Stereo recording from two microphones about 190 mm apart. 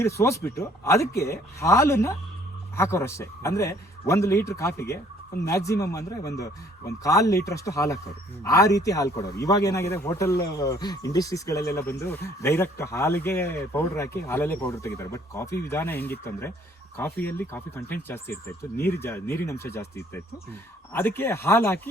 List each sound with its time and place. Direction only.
0.0 s a man's voice: 15° left (ahead or behind)